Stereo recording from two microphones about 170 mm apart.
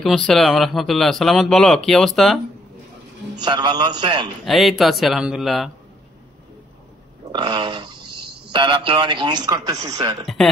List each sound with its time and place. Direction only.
0.0 s a man's voice: 5° left (ahead or behind)
3.3 s a man's voice: 25° right (ahead or behind)
4.5 s a man's voice: centre (ahead or behind)
7.3 s a sound: 25° right (ahead or behind)
8.5 s a man's voice: 30° right (ahead or behind)
10.2 s a man's voice: 5° left (ahead or behind)